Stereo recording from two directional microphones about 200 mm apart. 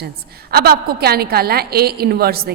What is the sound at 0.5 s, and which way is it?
A woman's voice, 50° right (ahead or behind).